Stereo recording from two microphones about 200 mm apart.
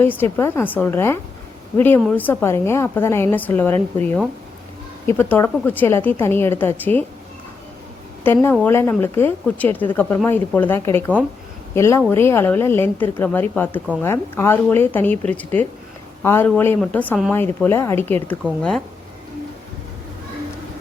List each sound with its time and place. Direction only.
0.0 s a woman's voice: 10° left (ahead or behind)
8.2 s a woman's voice: 10° left (ahead or behind)